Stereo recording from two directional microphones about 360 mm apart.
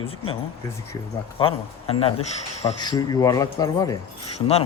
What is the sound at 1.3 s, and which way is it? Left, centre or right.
Speech, centre.